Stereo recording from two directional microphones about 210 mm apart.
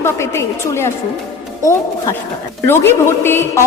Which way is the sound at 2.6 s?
10° left (ahead or behind).